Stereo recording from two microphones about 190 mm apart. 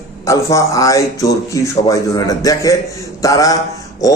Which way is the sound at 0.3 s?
15° left (ahead or behind).